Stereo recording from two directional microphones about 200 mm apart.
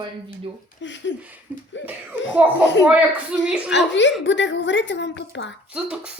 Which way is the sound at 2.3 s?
10° right (ahead or behind).